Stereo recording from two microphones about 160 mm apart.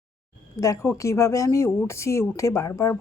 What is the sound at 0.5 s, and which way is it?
Speech, 20° left (ahead or behind).